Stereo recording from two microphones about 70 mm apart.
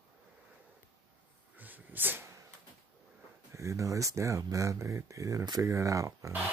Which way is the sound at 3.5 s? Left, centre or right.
Right.